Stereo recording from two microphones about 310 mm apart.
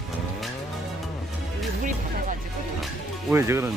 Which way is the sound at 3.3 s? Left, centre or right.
Centre.